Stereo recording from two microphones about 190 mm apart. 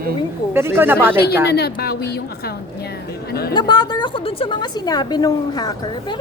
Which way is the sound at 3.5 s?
20° left (ahead or behind).